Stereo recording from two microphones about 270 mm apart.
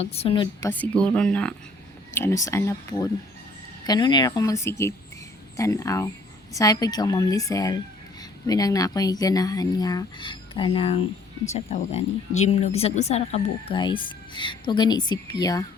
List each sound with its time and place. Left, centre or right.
0.0 s a woman's voice: left
0.7 s a woman's voice: centre